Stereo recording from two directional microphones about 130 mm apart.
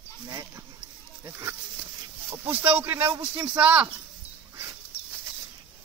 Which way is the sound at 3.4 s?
10° right (ahead or behind).